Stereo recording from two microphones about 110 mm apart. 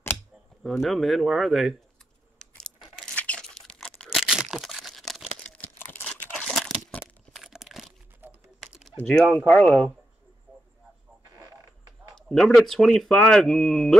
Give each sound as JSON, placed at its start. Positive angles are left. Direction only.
{"t": 0.7, "sound": "speech", "side_deg": 0}
{"t": 2.5, "sound": "a sound", "side_deg": 0}
{"t": 3.2, "sound": "tearing", "side_deg": 10}
{"t": 6.3, "sound": "crumpling", "side_deg": 5}
{"t": 8.2, "sound": "typing", "side_deg": -15}
{"t": 8.5, "sound": "typing", "side_deg": 0}
{"t": 8.9, "sound": "speech", "side_deg": 5}
{"t": 12.2, "sound": "speech", "side_deg": 5}